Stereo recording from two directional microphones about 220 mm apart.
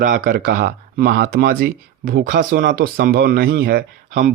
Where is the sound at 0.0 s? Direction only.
40° right (ahead or behind).